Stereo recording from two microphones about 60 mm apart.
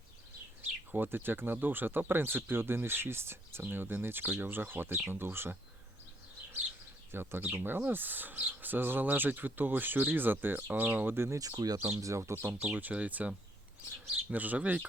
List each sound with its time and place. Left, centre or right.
0.9 s speech: right
7.1 s speech: right
11.3 s speech: right
11.9 s speech: right
12.5 s speech: right